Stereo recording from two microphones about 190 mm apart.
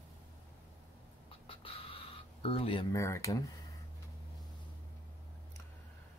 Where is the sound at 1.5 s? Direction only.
30° left (ahead or behind).